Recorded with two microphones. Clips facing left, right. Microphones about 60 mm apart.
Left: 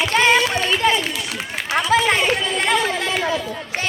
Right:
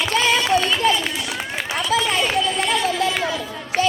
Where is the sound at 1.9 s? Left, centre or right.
Left.